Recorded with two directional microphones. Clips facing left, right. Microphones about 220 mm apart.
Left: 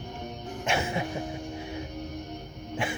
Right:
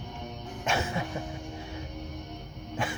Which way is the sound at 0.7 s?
10° left (ahead or behind).